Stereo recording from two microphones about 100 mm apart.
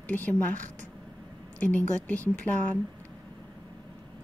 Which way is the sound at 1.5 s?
15° left (ahead or behind).